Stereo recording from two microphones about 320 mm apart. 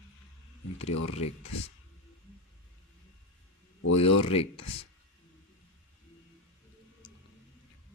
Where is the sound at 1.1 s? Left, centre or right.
Centre.